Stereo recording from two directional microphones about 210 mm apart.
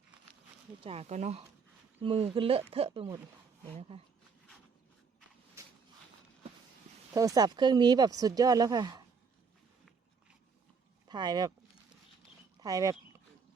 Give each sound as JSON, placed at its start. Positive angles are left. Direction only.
{"t": 0.8, "sound": "speech", "side_deg": -30}
{"t": 7.1, "sound": "speech", "side_deg": -15}
{"t": 11.1, "sound": "speech", "side_deg": -20}
{"t": 12.5, "sound": "speech", "side_deg": -15}